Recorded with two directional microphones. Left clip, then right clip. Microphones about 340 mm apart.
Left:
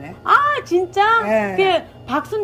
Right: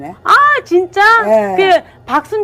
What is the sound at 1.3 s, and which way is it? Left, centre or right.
Speech, centre.